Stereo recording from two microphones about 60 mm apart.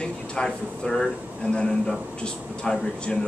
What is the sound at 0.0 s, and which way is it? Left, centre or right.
A man's voice, centre.